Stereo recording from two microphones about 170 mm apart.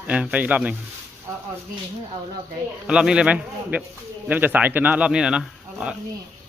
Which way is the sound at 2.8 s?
5° right (ahead or behind).